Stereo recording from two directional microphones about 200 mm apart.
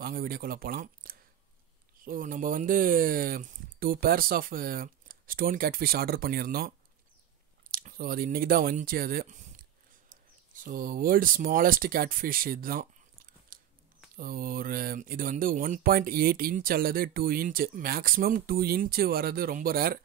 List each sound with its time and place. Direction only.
0.0 s speech: 45° right (ahead or behind)
7.7 s speech: 45° right (ahead or behind)